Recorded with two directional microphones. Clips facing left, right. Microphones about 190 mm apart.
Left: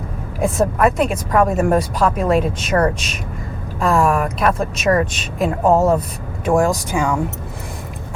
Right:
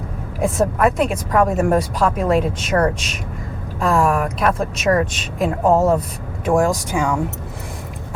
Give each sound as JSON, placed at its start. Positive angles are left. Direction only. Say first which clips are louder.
{"t": 0.4, "sound": "speech", "louder": "left 1 dB", "side_deg": 20}
{"t": 5.6, "sound": "speech", "louder": "left 1 dB", "side_deg": 30}